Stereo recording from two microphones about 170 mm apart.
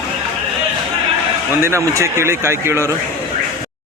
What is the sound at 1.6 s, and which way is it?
A man's voice, 15° right (ahead or behind).